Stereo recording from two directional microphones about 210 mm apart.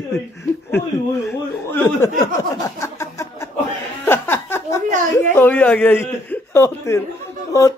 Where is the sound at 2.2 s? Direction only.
15° left (ahead or behind).